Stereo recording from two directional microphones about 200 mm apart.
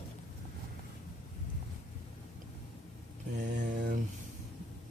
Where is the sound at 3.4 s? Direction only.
40° right (ahead or behind).